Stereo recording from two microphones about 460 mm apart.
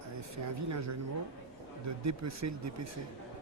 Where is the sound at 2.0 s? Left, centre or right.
Right.